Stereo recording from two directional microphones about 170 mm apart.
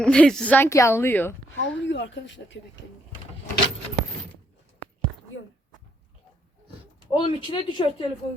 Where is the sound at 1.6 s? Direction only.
90° left.